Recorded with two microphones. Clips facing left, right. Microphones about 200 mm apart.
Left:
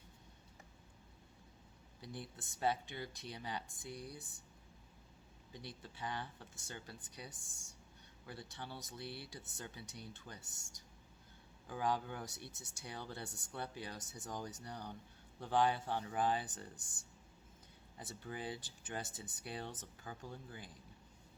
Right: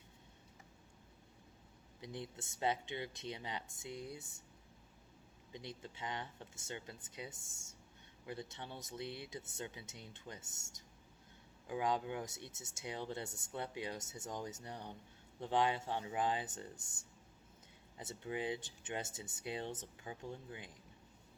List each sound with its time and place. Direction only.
2.0 s speech: 20° right (ahead or behind)
5.5 s speech: 20° right (ahead or behind)
18.0 s speech: 20° right (ahead or behind)